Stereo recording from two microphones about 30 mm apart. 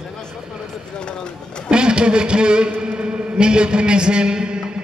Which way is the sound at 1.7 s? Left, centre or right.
Right.